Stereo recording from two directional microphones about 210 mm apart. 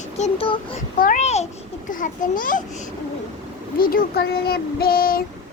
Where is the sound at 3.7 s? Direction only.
45° left (ahead or behind).